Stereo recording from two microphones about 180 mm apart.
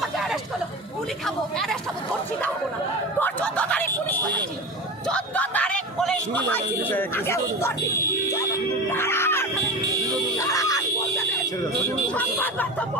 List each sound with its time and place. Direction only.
1.2 s speech: centre (ahead or behind)
3.2 s a sound: 10° left (ahead or behind)
8.9 s music: 15° left (ahead or behind)
12.1 s speech: 10° left (ahead or behind)